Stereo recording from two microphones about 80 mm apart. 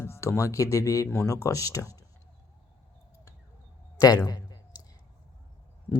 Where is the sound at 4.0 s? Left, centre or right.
Left.